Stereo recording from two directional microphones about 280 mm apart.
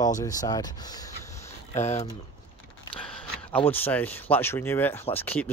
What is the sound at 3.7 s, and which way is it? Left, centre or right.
Speech, centre.